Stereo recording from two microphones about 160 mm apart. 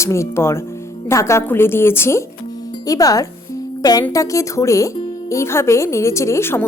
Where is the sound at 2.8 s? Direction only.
20° left (ahead or behind).